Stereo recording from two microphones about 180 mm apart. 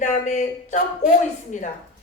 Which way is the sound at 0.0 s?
45° left (ahead or behind).